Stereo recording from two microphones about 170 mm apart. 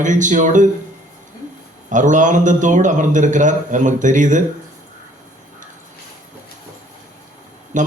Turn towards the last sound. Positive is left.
turn(degrees=-45)  # may be behind; listen again after turning